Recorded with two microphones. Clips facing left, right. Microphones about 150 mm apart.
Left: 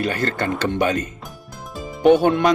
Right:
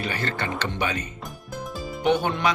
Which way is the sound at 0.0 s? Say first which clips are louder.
Left 6 dB; 45° left (ahead or behind).